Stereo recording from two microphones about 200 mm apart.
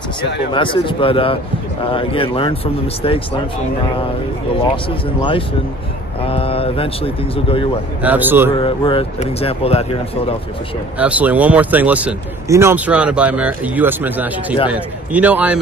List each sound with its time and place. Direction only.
0.5 s speech: 25° left (ahead or behind)
6.2 s speech: 30° left (ahead or behind)
8.0 s speech: 10° right (ahead or behind)
8.5 s speech: 25° left (ahead or behind)
11.0 s speech: 5° right (ahead or behind)